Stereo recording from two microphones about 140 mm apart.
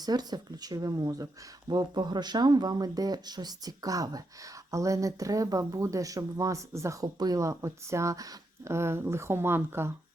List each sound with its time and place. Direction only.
0.0 s speech: 30° right (ahead or behind)